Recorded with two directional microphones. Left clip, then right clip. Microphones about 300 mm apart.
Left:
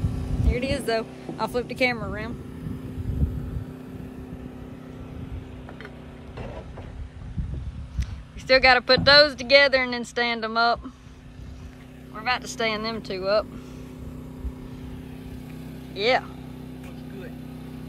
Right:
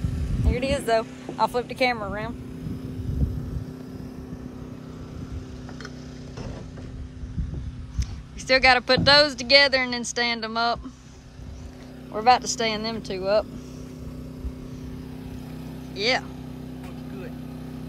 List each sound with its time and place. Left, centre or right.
0.0 s vehicle: left
0.5 s speech: centre
8.5 s speech: centre
12.3 s speech: centre
15.9 s speech: centre